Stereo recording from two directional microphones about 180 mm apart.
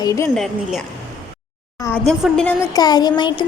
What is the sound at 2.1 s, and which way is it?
Music, 5° left (ahead or behind).